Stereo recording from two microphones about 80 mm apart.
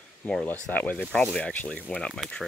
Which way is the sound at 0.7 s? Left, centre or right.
Centre.